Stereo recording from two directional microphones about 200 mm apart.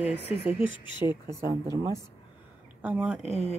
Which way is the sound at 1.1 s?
15° right (ahead or behind).